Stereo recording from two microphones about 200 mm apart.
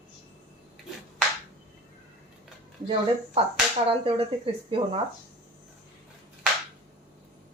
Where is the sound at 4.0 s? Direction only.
30° right (ahead or behind).